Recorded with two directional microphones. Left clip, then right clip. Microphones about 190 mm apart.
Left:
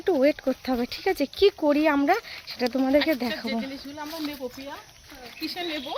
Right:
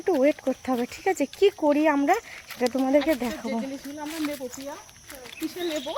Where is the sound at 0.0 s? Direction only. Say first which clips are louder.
Even; 5° left (ahead or behind).